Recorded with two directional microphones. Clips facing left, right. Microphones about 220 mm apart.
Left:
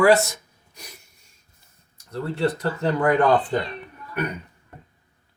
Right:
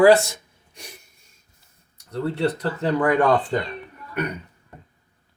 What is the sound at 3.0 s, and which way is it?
Speech, 25° left (ahead or behind).